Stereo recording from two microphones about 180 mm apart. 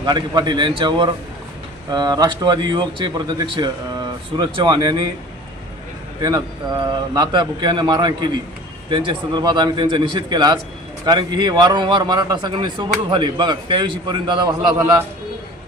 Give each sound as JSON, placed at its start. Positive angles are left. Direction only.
{"t": 0.0, "sound": "a man's voice", "side_deg": -25}
{"t": 6.2, "sound": "a man's voice", "side_deg": -20}